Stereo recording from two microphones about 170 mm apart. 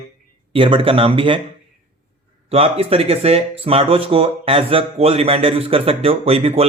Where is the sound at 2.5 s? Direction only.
35° right (ahead or behind).